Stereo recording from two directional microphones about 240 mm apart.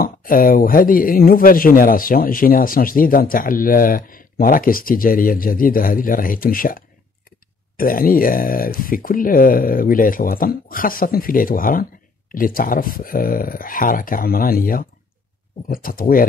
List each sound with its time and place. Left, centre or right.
0.0 s speech: left